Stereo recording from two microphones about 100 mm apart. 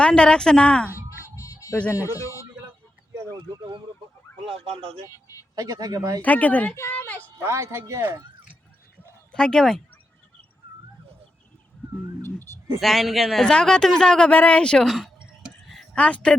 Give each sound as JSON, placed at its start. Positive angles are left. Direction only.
{"t": 0.0, "sound": "a woman's voice", "side_deg": 10}
{"t": 1.4, "sound": "music", "side_deg": 35}
{"t": 2.0, "sound": "speech", "side_deg": 35}
{"t": 4.4, "sound": "speech", "side_deg": -70}
{"t": 5.1, "sound": "speech", "side_deg": 35}
{"t": 5.5, "sound": "speech", "side_deg": -35}
{"t": 6.2, "sound": "a woman's voice", "side_deg": 15}
{"t": 7.2, "sound": "speech", "side_deg": -25}
{"t": 9.3, "sound": "a man's voice", "side_deg": 5}
{"t": 12.2, "sound": "speech", "side_deg": 25}
{"t": 12.8, "sound": "a man's voice", "side_deg": 0}
{"t": 15.4, "sound": "a sound", "side_deg": 0}
{"t": 16.0, "sound": "a woman's voice", "side_deg": 10}